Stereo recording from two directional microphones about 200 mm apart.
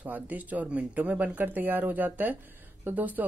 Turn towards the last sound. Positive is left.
turn(degrees=-10)  # may be behind; listen again after turning